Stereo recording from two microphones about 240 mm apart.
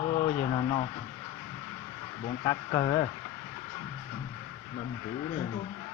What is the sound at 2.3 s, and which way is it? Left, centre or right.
Speech, centre.